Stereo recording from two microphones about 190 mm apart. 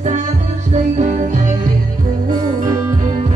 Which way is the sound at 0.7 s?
40° right (ahead or behind).